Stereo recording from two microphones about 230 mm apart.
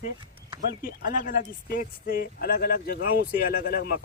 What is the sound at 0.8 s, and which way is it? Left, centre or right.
Speech, left.